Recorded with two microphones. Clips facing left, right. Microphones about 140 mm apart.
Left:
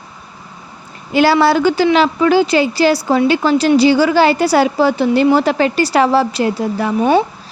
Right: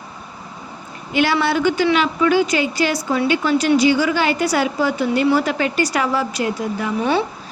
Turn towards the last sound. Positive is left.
turn(degrees=45)  # may be behind; listen again after turning